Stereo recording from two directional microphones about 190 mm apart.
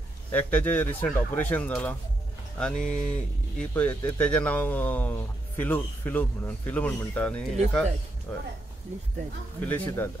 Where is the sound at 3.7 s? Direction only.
10° left (ahead or behind).